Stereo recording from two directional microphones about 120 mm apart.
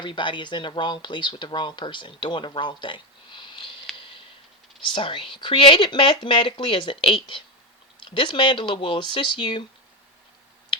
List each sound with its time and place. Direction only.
0.0 s speech: 40° left (ahead or behind)
3.9 s a sound: 45° left (ahead or behind)
4.9 s speech: 45° left (ahead or behind)